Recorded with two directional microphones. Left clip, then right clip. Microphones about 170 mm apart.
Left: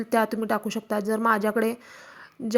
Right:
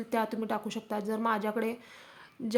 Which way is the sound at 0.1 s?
30° left (ahead or behind).